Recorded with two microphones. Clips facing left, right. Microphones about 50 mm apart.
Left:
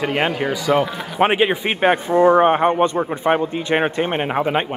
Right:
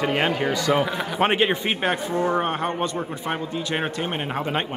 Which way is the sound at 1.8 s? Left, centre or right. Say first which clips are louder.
Left 9 dB; left.